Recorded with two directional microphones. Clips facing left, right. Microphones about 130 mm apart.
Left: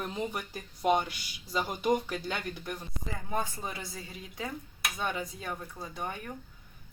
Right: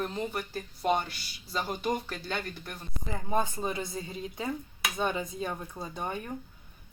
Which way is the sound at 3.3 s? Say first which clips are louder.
Right 5 dB; 20° right (ahead or behind).